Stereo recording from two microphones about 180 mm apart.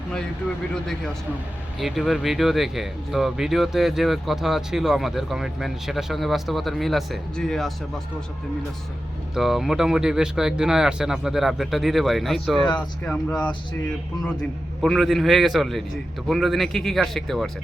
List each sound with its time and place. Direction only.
1.8 s speech: centre (ahead or behind)
9.3 s speech: centre (ahead or behind)
14.8 s speech: centre (ahead or behind)